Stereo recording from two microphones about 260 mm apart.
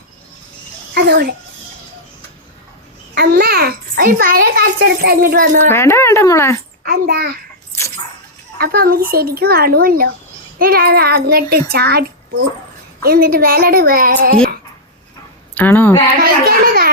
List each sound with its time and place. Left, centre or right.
0.9 s a child's voice: right
3.2 s a child's voice: right
5.5 s speech: centre
6.8 s a child's voice: right
8.5 s a child's voice: right
15.5 s speech: centre
16.1 s speech: right